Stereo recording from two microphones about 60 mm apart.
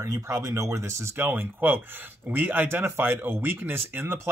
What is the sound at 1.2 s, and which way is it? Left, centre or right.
Speech, right.